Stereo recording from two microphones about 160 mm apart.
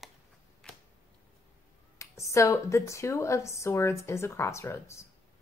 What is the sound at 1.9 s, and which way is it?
A woman's voice, 20° left (ahead or behind).